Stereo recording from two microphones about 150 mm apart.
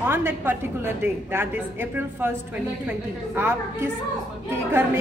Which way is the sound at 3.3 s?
15° right (ahead or behind).